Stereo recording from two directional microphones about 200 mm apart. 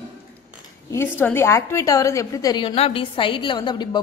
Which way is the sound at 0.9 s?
10° left (ahead or behind).